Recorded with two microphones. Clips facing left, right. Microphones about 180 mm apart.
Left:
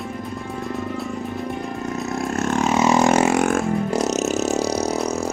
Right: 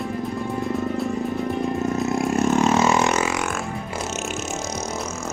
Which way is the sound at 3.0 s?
50° left (ahead or behind).